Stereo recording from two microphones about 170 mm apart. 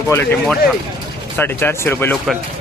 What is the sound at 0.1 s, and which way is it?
Speech, 15° left (ahead or behind).